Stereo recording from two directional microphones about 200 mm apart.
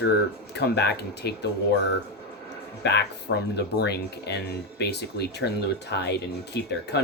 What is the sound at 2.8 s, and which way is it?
Speech, 55° left (ahead or behind).